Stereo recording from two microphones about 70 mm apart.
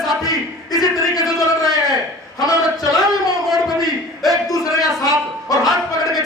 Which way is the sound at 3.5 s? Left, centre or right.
Centre.